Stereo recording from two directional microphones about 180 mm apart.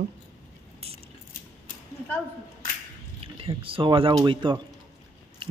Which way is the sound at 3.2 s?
30° right (ahead or behind).